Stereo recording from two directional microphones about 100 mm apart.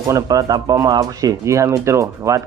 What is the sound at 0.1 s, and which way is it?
Speech, 35° right (ahead or behind).